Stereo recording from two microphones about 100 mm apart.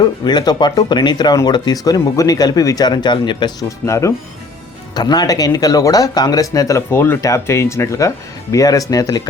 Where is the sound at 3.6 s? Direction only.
30° left (ahead or behind).